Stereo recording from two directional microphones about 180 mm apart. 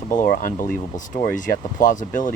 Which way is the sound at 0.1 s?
45° left (ahead or behind).